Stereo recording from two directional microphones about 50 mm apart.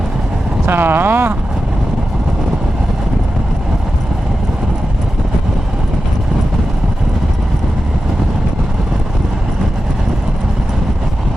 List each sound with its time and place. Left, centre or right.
0.6 s speech: right